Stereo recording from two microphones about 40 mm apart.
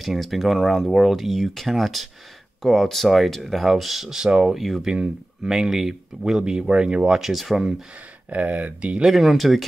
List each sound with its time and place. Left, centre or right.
0.0 s speech: centre
4.6 s speech: centre
4.8 s speech: centre
7.2 s speech: centre
8.3 s speech: right
9.0 s speech: centre